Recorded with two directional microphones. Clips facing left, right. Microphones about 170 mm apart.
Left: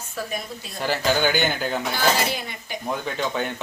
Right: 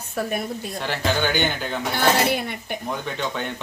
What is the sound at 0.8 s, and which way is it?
Speech, 5° left (ahead or behind).